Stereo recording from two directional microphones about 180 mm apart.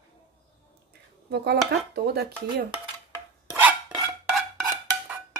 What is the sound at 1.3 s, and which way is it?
Speech, 65° right (ahead or behind).